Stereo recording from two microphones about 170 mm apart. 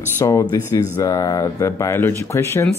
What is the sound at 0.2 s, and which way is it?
Speech, 20° left (ahead or behind).